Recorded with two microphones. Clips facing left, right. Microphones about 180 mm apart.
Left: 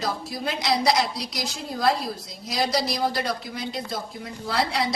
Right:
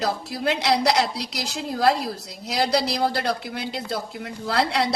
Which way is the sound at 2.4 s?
70° right (ahead or behind).